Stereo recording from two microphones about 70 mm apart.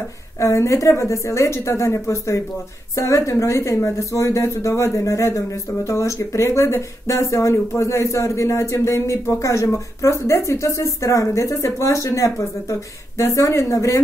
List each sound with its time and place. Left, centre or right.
0.4 s speech: left